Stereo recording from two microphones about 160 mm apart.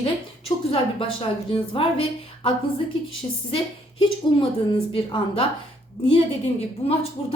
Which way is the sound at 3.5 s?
35° left (ahead or behind).